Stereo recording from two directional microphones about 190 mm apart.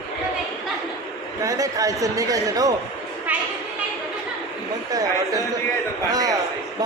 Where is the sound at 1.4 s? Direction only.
20° right (ahead or behind).